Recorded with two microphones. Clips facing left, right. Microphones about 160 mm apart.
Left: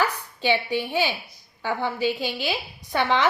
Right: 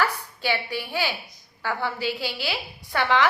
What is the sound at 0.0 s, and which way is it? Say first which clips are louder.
A woman's voice: left 1 dB; 20° left (ahead or behind).